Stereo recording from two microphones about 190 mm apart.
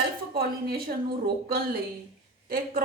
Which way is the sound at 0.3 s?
55° right (ahead or behind).